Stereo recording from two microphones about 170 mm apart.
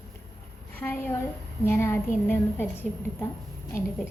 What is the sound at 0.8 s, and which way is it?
A woman's voice, 15° left (ahead or behind).